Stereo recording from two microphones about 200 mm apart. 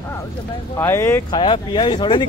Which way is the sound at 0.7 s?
15° left (ahead or behind).